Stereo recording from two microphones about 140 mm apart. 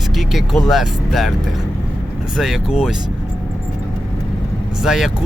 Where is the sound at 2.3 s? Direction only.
Centre (ahead or behind).